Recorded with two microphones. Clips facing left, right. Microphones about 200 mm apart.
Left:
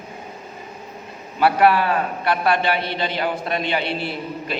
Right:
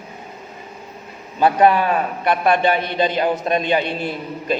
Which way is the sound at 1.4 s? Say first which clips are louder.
Right 2 dB; 20° right (ahead or behind).